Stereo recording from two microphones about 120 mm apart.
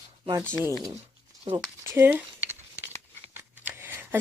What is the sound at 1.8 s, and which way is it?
Speech, 20° right (ahead or behind).